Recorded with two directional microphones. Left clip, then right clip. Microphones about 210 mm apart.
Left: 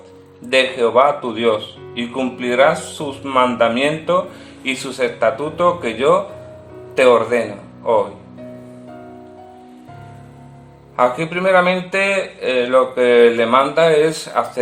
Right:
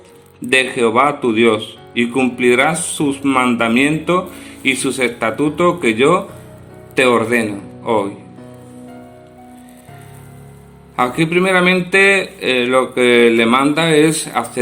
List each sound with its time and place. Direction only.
0.5 s speech: 30° right (ahead or behind)
10.9 s speech: 30° right (ahead or behind)